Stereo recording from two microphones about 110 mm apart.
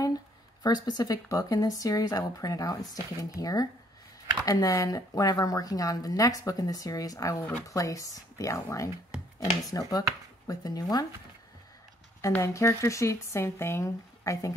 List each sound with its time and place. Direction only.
0.6 s speech: 40° left (ahead or behind)
12.4 s speech: 25° left (ahead or behind)